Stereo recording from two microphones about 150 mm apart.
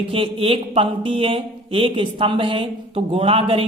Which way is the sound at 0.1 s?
40° right (ahead or behind).